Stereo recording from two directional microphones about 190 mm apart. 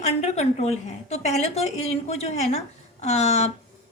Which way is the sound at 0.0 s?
35° left (ahead or behind).